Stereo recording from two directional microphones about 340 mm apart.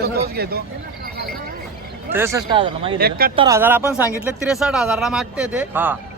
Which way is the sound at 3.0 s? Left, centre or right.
Right.